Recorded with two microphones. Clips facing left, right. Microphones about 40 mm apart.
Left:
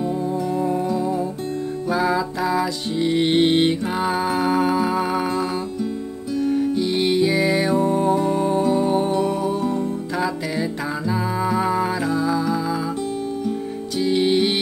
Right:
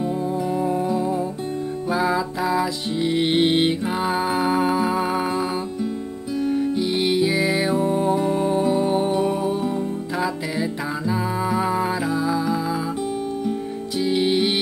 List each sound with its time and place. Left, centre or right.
0.0 s music: centre